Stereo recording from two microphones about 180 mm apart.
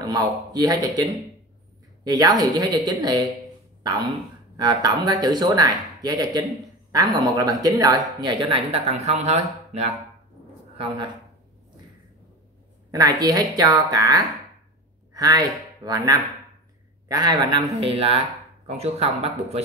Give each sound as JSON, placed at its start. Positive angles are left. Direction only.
{"t": 0.0, "sound": "a man's voice", "side_deg": -20}
{"t": 2.0, "sound": "speech", "side_deg": -20}
{"t": 4.6, "sound": "speech", "side_deg": -25}
{"t": 12.9, "sound": "speech", "side_deg": -20}